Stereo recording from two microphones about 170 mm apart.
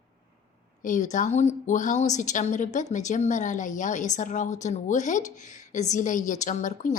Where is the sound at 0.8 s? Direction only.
50° left (ahead or behind).